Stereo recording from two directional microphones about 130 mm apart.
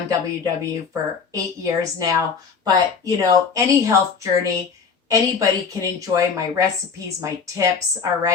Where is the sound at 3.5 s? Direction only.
25° right (ahead or behind).